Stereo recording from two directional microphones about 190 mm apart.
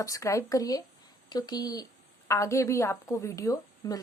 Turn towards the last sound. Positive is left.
turn(degrees=15)  # may be behind; listen again after turning